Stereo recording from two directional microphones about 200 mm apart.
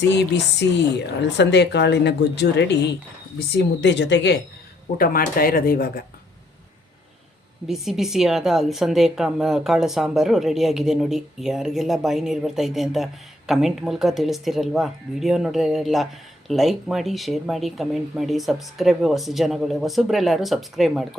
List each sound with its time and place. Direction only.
0.1 s a woman's voice: 60° left (ahead or behind)
4.9 s speech: 45° left (ahead or behind)
7.7 s a woman's voice: centre (ahead or behind)